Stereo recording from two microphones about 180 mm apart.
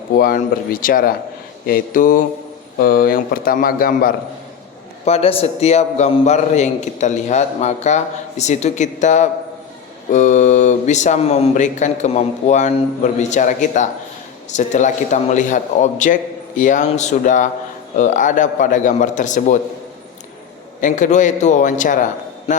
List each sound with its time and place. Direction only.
0.2 s a man's voice: 55° left (ahead or behind)
5.0 s a man's voice: 35° left (ahead or behind)
20.8 s a man's voice: 45° left (ahead or behind)